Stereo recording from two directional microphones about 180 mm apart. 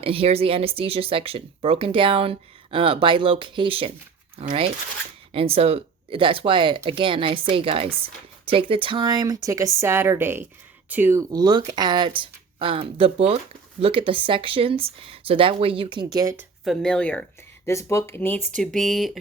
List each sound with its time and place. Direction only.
0.0 s speech: 30° right (ahead or behind)
16.6 s speech: 5° left (ahead or behind)